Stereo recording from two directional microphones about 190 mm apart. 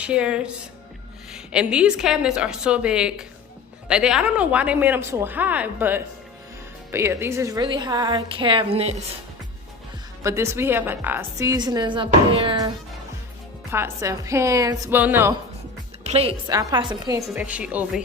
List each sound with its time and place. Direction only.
0.0 s a woman's voice: 5° right (ahead or behind); by 9.0 s 30° right (ahead or behind)
10.2 s a woman's voice: 15° right (ahead or behind)
13.7 s a woman's voice: 15° right (ahead or behind)
16.0 s a woman's voice: 30° right (ahead or behind)
16.5 s a woman's voice: 20° right (ahead or behind)
17.3 s a woman's voice: 5° right (ahead or behind)